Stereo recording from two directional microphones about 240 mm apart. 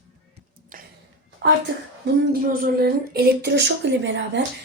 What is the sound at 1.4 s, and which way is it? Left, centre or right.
Speech, right.